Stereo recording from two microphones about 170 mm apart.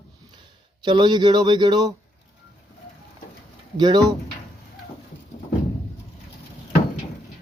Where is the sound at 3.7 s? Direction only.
25° right (ahead or behind).